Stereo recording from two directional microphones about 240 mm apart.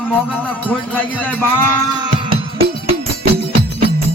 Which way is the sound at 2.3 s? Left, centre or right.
Right.